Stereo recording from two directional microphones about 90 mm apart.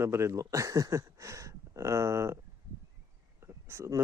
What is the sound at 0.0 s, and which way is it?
Speech, 30° right (ahead or behind).